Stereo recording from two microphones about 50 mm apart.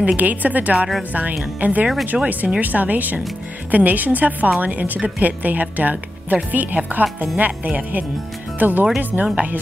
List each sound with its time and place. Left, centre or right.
0.0 s speech: right
0.7 s speech: centre
1.1 s speech: right
2.1 s speech: centre
2.6 s speech: right
9.2 s speech: right